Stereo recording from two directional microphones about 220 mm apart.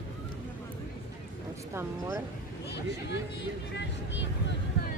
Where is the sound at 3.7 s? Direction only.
55° left (ahead or behind).